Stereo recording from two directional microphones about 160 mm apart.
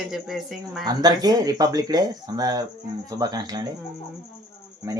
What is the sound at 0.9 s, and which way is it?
Speech, 25° right (ahead or behind).